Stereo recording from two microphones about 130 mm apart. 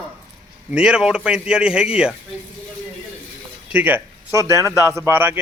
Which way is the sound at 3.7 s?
10° right (ahead or behind).